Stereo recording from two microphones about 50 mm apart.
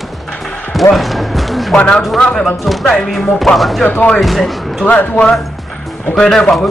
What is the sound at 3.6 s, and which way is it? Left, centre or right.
Speech, centre.